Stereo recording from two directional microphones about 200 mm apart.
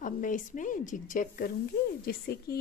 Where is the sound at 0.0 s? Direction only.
40° left (ahead or behind).